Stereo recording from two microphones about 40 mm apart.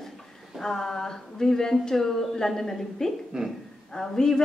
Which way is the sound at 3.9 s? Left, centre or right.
Centre.